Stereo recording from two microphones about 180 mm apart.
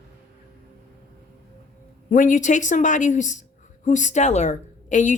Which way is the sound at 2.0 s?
45° left (ahead or behind).